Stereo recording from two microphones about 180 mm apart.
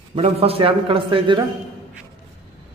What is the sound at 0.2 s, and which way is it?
A man's voice, 35° right (ahead or behind).